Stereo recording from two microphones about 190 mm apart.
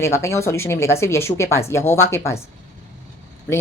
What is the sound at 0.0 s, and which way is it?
Speech, 15° left (ahead or behind).